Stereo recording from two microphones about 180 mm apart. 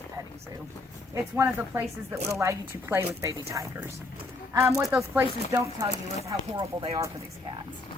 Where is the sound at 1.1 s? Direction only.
15° right (ahead or behind).